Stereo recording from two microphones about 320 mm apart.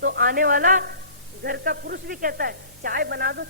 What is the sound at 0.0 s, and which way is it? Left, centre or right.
Speech, right.